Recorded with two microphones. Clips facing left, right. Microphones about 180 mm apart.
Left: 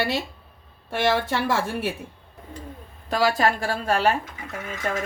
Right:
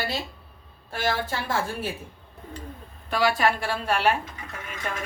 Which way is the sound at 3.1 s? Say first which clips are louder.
Left 2 dB; 35° left (ahead or behind).